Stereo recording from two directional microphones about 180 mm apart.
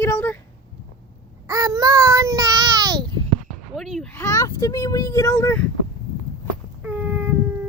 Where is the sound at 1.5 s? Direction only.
20° right (ahead or behind).